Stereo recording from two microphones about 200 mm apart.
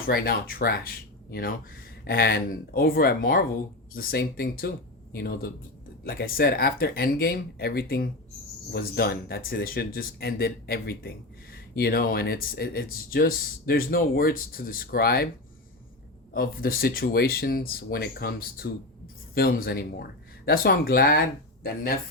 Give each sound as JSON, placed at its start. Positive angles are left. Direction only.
{"t": 0.1, "sound": "speech", "side_deg": 50}
{"t": 16.3, "sound": "speech", "side_deg": 45}